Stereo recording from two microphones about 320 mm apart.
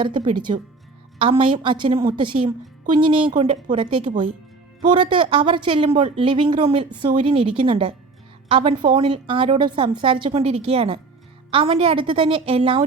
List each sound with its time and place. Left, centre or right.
0.0 s a woman's voice: centre